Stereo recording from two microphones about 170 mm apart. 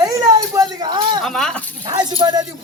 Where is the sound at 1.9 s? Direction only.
25° right (ahead or behind).